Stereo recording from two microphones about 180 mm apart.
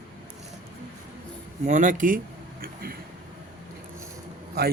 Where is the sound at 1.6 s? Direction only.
45° right (ahead or behind).